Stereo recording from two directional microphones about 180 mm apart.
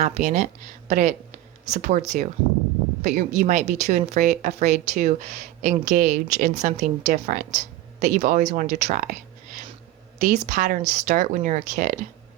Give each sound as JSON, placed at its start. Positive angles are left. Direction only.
{"t": 0.0, "sound": "speech", "side_deg": -40}